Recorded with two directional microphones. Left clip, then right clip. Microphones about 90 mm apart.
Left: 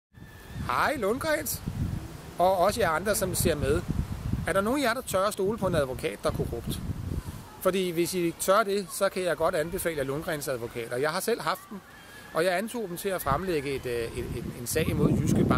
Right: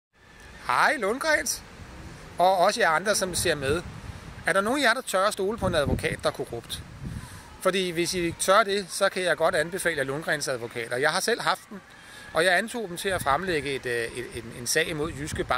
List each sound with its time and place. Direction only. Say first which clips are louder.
0.7 s speech: right 4 dB; 10° right (ahead or behind)